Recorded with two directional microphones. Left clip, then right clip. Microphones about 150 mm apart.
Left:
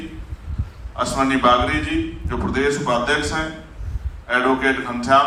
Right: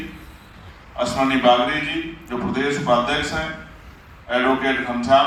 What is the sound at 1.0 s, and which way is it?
A man's voice, 20° left (ahead or behind).